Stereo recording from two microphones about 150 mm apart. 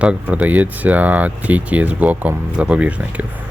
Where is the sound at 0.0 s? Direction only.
10° right (ahead or behind).